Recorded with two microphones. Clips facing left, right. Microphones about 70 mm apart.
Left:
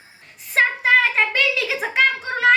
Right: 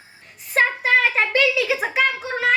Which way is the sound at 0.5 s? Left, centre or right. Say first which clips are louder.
Left 1 dB; centre.